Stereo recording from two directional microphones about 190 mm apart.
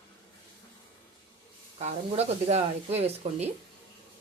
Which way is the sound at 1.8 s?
35° right (ahead or behind).